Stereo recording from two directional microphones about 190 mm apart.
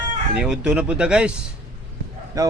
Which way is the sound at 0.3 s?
5° right (ahead or behind).